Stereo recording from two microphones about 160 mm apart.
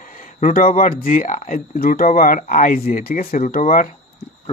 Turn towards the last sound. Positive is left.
turn(degrees=60)  # may be behind; listen again after turning